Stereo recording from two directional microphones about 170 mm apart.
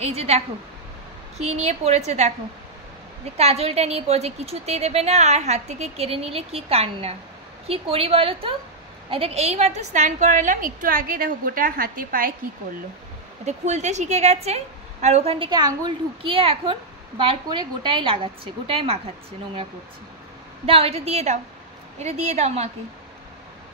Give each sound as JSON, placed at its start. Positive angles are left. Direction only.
{"t": 0.0, "sound": "a woman's voice", "side_deg": -35}
{"t": 1.4, "sound": "a woman's voice", "side_deg": -40}
{"t": 3.3, "sound": "a woman's voice", "side_deg": -40}
{"t": 13.5, "sound": "a woman's voice", "side_deg": -40}
{"t": 20.6, "sound": "a woman's voice", "side_deg": -35}